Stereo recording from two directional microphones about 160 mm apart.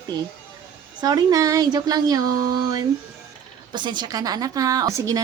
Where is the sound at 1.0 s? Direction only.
20° right (ahead or behind).